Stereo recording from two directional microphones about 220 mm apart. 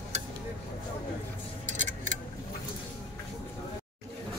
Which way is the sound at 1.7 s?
35° right (ahead or behind).